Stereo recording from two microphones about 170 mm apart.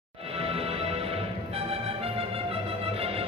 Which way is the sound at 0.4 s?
35° right (ahead or behind).